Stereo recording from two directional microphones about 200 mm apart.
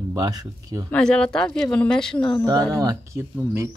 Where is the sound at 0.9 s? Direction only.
5° left (ahead or behind).